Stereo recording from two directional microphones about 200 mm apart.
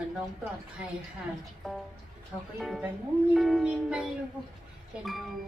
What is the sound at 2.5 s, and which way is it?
Speech, centre (ahead or behind).